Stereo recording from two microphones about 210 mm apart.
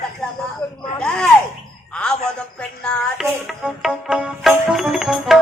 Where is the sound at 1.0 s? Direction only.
5° left (ahead or behind).